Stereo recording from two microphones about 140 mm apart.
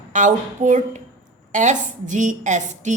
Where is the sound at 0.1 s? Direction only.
65° right (ahead or behind).